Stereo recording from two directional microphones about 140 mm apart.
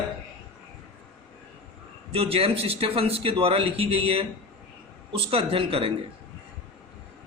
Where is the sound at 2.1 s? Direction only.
45° right (ahead or behind).